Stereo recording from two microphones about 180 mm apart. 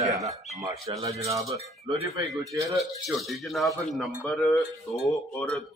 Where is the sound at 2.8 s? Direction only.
Centre (ahead or behind).